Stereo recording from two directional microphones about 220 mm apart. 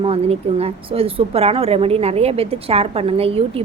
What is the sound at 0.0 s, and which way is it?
Speech, 25° right (ahead or behind).